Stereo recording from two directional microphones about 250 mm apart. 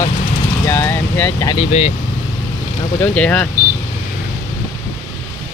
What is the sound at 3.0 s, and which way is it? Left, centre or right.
Speech, centre.